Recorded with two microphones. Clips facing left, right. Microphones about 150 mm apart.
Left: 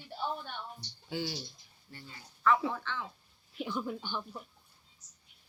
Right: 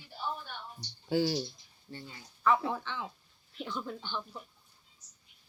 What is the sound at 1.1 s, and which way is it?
Speech, 40° right (ahead or behind).